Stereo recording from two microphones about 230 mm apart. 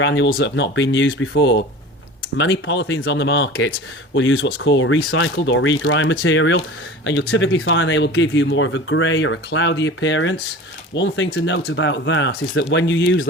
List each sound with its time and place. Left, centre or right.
0.0 s speech: left